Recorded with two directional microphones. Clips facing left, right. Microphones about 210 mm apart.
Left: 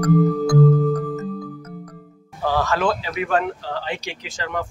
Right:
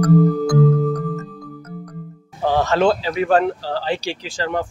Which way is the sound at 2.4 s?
20° right (ahead or behind).